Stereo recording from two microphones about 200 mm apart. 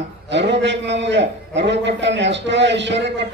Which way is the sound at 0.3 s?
60° right (ahead or behind).